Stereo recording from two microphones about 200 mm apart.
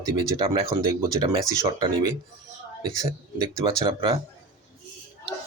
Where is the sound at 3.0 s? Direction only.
15° right (ahead or behind).